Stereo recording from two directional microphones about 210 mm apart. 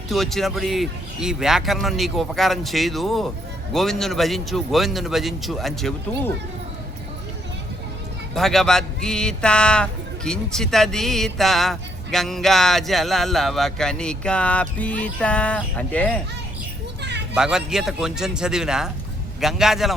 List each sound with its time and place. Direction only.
0.1 s speech: centre (ahead or behind)
8.4 s speech: centre (ahead or behind)
17.0 s children playing: 55° right (ahead or behind)
17.3 s speech: 5° right (ahead or behind)